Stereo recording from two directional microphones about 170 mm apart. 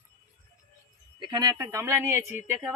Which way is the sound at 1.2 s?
25° right (ahead or behind).